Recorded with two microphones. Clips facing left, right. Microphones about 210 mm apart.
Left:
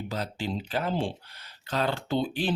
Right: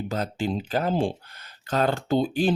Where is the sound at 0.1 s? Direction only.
50° right (ahead or behind).